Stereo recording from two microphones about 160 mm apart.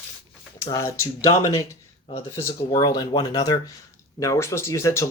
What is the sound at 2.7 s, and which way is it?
Speech, 25° left (ahead or behind).